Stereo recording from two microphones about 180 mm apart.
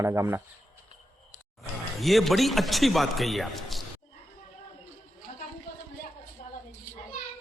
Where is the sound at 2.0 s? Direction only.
Centre (ahead or behind).